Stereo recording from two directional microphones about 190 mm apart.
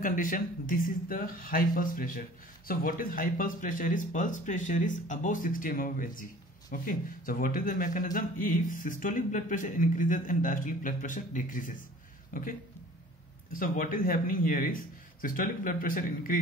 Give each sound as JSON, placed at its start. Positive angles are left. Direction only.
{"t": 0.0, "sound": "a man's voice", "side_deg": 45}